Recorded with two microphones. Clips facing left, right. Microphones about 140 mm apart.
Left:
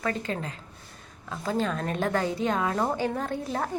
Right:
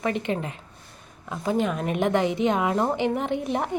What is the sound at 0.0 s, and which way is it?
A woman's voice, 20° right (ahead or behind).